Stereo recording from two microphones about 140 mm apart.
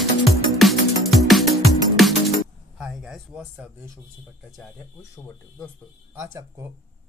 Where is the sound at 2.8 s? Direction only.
5° right (ahead or behind).